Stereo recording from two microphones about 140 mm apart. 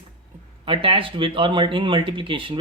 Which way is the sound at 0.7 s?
40° right (ahead or behind).